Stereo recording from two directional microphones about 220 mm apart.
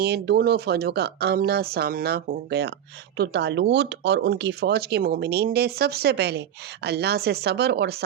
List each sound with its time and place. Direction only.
0.0 s speech: 45° right (ahead or behind)